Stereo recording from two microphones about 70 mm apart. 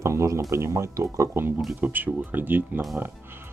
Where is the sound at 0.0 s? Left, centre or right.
Right.